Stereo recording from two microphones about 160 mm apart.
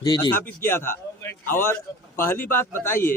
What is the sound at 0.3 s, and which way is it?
A man's voice, 15° left (ahead or behind).